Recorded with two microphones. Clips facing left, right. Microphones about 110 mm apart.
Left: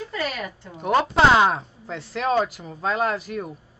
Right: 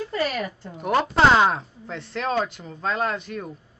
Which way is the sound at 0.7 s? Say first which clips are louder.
Left 1 dB; centre (ahead or behind).